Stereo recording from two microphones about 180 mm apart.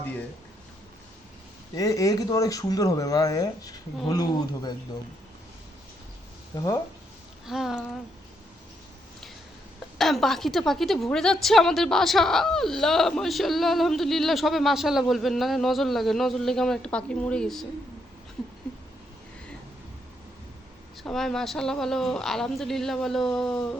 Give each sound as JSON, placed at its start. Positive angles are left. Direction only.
{"t": 1.7, "sound": "speech", "side_deg": 20}
{"t": 6.6, "sound": "speech", "side_deg": 15}
{"t": 7.4, "sound": "a woman's voice", "side_deg": 0}
{"t": 10.0, "sound": "a woman's voice", "side_deg": 0}
{"t": 21.0, "sound": "a woman's voice", "side_deg": 0}